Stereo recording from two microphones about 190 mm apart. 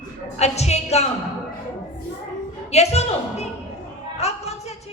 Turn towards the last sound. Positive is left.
turn(degrees=35)  # may be behind; listen again after turning